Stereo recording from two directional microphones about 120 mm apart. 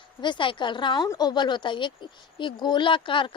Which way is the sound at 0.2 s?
40° left (ahead or behind).